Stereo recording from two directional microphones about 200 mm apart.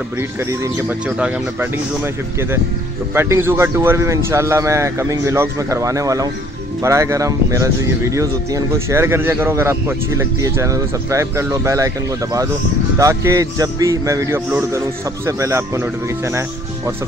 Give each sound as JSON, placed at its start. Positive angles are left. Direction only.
{"t": 0.2, "sound": "speech", "side_deg": -15}
{"t": 3.2, "sound": "speech", "side_deg": -10}